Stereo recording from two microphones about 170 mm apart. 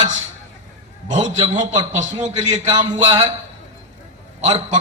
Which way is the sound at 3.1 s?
25° right (ahead or behind).